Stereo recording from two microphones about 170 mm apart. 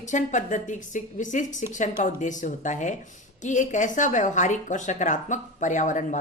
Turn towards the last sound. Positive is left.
turn(degrees=45)  # may be behind; listen again after turning